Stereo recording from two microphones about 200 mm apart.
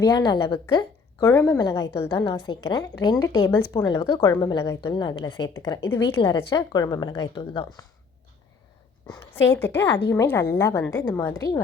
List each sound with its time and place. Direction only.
0.0 s a woman's voice: 20° left (ahead or behind)
9.3 s a woman's voice: 10° left (ahead or behind)